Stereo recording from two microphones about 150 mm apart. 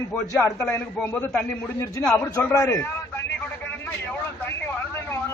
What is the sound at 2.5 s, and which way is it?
Speech, 15° left (ahead or behind).